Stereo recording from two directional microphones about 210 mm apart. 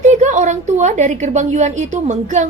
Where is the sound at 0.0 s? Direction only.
35° right (ahead or behind).